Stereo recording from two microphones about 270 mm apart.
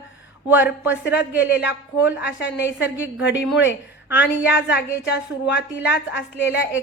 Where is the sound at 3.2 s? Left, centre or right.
Left.